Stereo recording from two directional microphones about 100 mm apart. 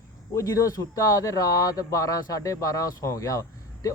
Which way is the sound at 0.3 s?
35° left (ahead or behind).